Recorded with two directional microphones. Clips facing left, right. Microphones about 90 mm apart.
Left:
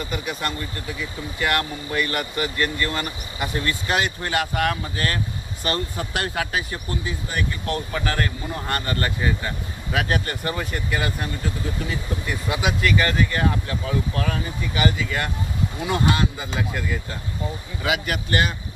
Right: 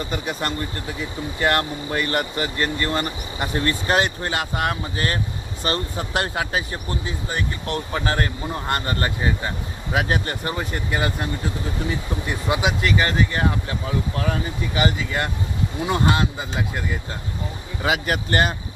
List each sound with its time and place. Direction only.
0.1 s speech: 35° right (ahead or behind)
12.3 s speech: 25° right (ahead or behind)
17.8 s speech: 35° right (ahead or behind)